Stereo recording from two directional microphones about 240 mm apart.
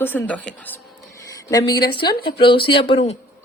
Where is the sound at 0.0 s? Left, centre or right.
Centre.